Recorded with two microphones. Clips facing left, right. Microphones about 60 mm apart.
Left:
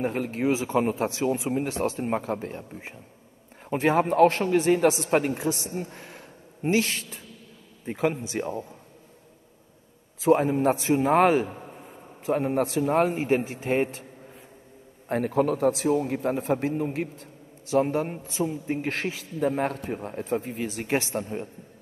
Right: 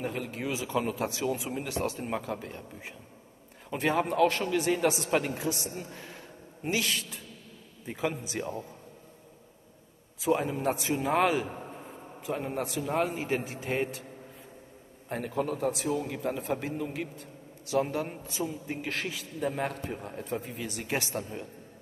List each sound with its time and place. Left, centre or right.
0.0 s a man's voice: left
5.9 s a sound: centre
6.7 s a man's voice: left
8.3 s a man's voice: left
10.2 s a man's voice: left
10.5 s a man's voice: left
13.0 s a man's voice: left
15.0 s a man's voice: left
17.6 s a man's voice: left